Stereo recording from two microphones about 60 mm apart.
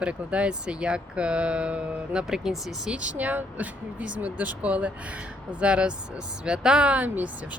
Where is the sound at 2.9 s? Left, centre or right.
Right.